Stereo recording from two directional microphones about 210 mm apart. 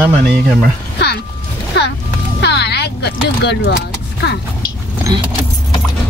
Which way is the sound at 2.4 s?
55° left (ahead or behind).